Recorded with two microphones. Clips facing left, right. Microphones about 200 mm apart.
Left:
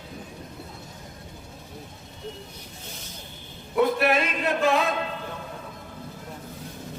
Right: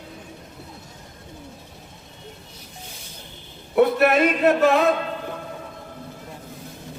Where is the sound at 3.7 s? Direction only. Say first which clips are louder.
Right 5 dB; 55° right (ahead or behind).